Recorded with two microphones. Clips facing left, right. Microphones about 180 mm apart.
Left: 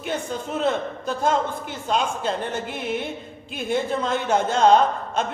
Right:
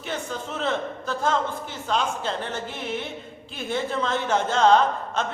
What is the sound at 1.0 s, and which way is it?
Speech, 15° left (ahead or behind).